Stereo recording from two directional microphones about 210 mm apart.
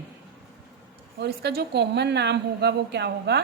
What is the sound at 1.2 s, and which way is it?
A woman's voice, 50° right (ahead or behind).